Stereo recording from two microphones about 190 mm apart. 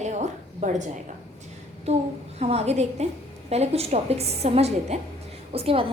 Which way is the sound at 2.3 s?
35° right (ahead or behind).